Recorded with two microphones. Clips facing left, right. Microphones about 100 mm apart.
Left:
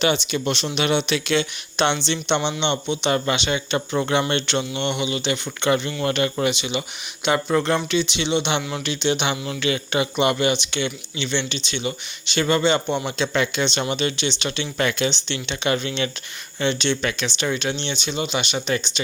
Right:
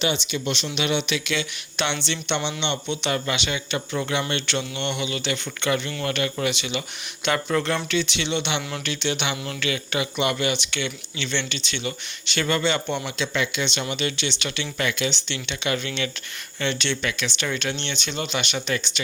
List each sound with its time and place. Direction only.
0.0 s speech: 50° left (ahead or behind); by 3.1 s 20° left (ahead or behind)
3.1 s speech: 30° left (ahead or behind)
13.1 s speech: 35° left (ahead or behind)